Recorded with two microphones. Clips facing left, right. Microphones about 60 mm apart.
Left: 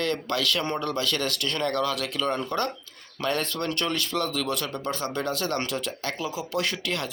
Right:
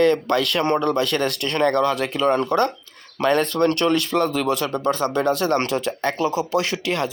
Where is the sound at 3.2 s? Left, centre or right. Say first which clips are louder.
Right 9 dB; right.